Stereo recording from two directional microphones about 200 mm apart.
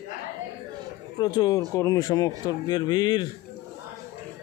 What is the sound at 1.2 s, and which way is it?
Speech, 20° left (ahead or behind).